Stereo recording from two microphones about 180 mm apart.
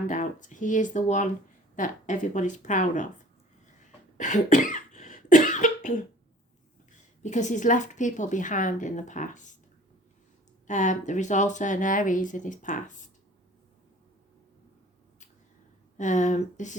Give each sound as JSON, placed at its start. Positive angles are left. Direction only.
{"t": 0.1, "sound": "speech", "side_deg": 45}
{"t": 4.2, "sound": "cough", "side_deg": 45}
{"t": 7.2, "sound": "speech", "side_deg": 40}
{"t": 10.7, "sound": "speech", "side_deg": 45}
{"t": 16.0, "sound": "speech", "side_deg": 45}